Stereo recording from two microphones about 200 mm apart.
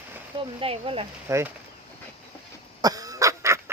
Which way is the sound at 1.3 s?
15° right (ahead or behind).